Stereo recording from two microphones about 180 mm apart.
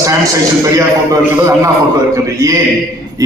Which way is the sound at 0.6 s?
20° right (ahead or behind).